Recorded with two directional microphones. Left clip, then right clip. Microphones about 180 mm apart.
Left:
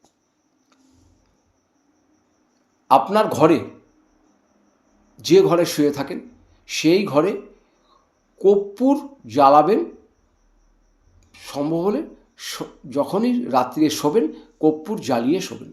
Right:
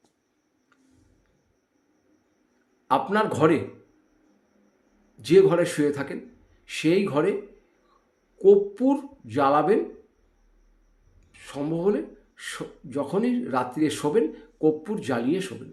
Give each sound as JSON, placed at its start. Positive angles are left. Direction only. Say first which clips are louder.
{"t": 2.8, "sound": "speech", "louder": "left 7 dB", "side_deg": -15}
{"t": 5.2, "sound": "speech", "louder": "left 3 dB", "side_deg": -20}
{"t": 8.4, "sound": "speech", "louder": "left 1 dB", "side_deg": -20}
{"t": 11.3, "sound": "speech", "louder": "left 6 dB", "side_deg": -15}